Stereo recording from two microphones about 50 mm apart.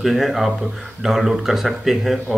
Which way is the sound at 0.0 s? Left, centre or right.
Centre.